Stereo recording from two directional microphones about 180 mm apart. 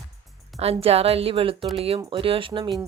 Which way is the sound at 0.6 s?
35° right (ahead or behind).